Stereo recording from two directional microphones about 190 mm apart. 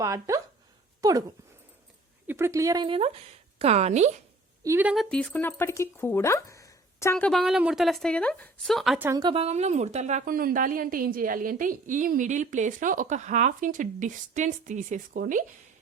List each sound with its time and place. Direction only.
0.0 s speech: 15° right (ahead or behind)
1.0 s dog: 20° right (ahead or behind)
2.2 s a woman's voice: 15° right (ahead or behind); by 4.2 s 35° right (ahead or behind)
4.6 s a woman's voice: 10° right (ahead or behind)
5.0 s speech: 5° left (ahead or behind)
7.3 s speech: centre (ahead or behind)
9.0 s a woman's voice: 20° right (ahead or behind); by 15.4 s 45° right (ahead or behind)